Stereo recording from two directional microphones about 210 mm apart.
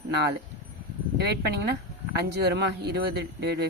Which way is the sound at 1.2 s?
50° right (ahead or behind).